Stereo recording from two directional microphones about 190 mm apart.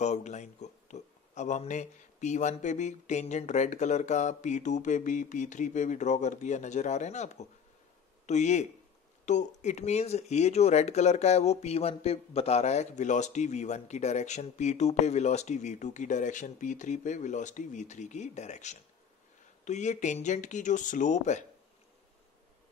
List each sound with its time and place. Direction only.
0.0 s speech: 35° left (ahead or behind)